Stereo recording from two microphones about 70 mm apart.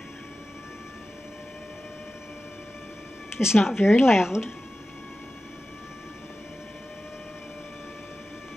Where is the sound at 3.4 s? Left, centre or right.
Centre.